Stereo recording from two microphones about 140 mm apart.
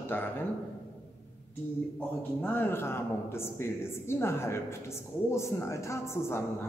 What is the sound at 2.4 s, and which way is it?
A woman's voice, 15° left (ahead or behind).